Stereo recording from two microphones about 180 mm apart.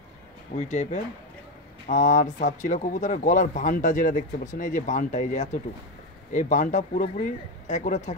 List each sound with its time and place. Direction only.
0.6 s speech: 40° left (ahead or behind)